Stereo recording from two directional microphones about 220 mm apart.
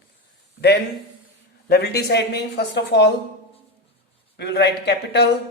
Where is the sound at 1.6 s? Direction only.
45° left (ahead or behind).